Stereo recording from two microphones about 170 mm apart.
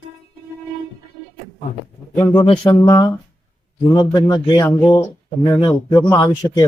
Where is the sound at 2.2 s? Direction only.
15° left (ahead or behind).